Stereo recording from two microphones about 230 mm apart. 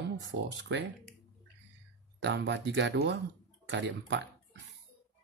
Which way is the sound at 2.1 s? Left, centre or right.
Right.